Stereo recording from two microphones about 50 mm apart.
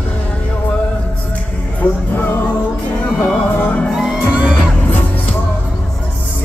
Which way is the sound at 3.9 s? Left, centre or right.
Centre.